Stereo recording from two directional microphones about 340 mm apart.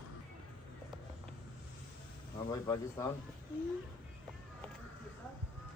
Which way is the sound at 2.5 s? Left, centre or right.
Centre.